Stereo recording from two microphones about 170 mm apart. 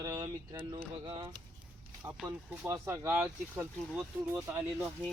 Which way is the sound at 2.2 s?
15° right (ahead or behind).